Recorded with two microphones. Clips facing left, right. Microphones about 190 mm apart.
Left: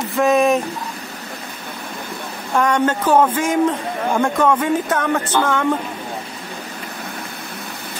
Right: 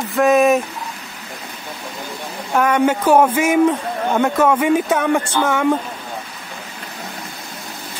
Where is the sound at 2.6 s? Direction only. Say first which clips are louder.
Right 1 dB; 5° right (ahead or behind).